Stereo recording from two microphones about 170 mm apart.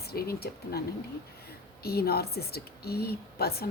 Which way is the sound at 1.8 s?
65° left (ahead or behind).